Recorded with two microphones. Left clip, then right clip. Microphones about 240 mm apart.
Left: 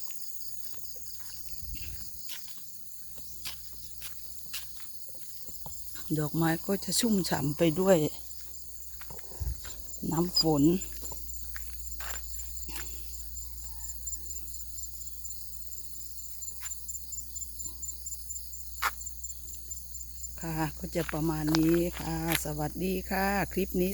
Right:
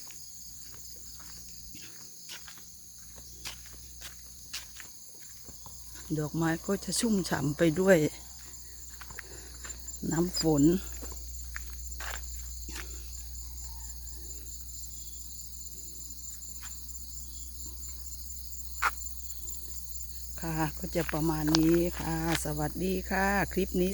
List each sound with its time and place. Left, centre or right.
1.7 s insect: centre
3.4 s insect: centre
4.5 s cricket: centre
6.1 s speech: left; by 8.1 s centre
10.1 s speech: centre
11.5 s insect: centre
12.6 s cricket: centre
18.8 s cricket: centre
20.4 s cricket: centre
21.2 s speech: centre